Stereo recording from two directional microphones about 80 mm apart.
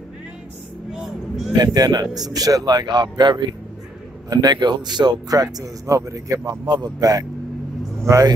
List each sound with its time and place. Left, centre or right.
0.9 s vehicle: centre
1.5 s speech: right
6.6 s speech: right